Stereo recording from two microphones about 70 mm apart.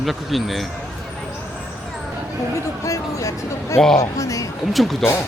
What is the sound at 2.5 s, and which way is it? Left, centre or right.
Speech, left.